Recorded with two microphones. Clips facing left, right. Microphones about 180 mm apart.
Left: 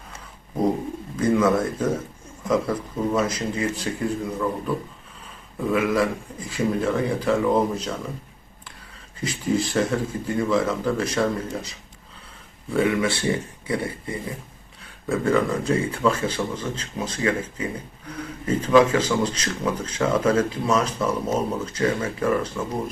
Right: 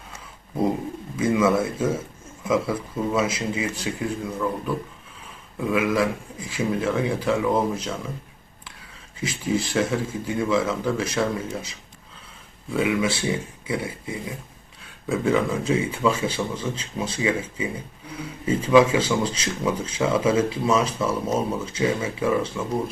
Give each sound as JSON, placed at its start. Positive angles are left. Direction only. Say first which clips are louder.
{"t": 1.1, "sound": "speech", "louder": "left 1 dB", "side_deg": -5}
{"t": 9.1, "sound": "speech", "louder": "left 1 dB", "side_deg": 0}